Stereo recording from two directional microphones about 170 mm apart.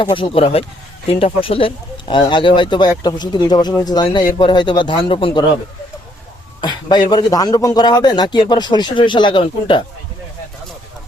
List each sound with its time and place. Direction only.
0.0 s speech: 30° left (ahead or behind)
6.6 s a sound: 25° left (ahead or behind)
7.1 s speech: 25° left (ahead or behind)